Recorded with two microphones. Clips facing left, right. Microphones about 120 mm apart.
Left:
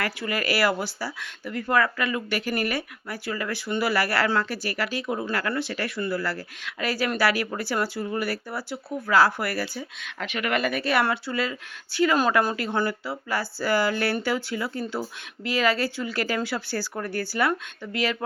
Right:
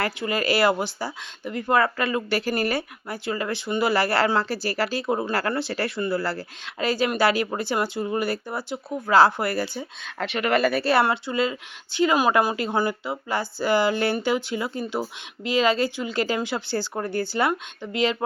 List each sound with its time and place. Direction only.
0.0 s speech: 25° right (ahead or behind)
11.0 s speech: 20° right (ahead or behind)